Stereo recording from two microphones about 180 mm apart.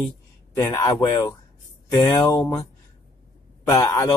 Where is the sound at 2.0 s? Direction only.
5° left (ahead or behind).